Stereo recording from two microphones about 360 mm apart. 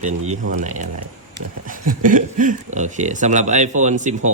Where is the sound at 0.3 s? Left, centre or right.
Centre.